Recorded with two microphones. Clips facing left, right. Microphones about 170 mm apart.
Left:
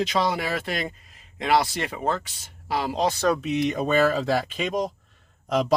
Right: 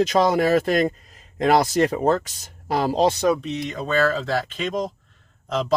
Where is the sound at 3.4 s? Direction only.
15° left (ahead or behind).